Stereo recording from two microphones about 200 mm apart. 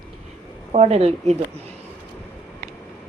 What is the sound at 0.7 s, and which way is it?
Speech, 30° right (ahead or behind).